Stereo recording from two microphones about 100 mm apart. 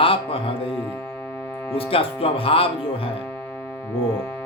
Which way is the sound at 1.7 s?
70° left (ahead or behind).